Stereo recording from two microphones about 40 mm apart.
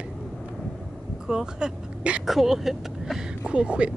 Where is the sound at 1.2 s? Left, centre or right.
Centre.